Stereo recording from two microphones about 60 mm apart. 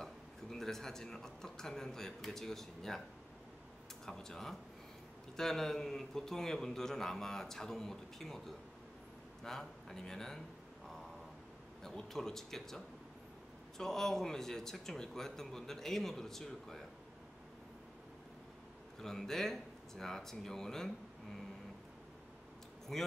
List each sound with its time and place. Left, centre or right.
0.0 s a man's voice: centre
4.0 s a man's voice: centre
11.8 s a man's voice: centre
18.9 s a man's voice: centre
22.9 s speech: centre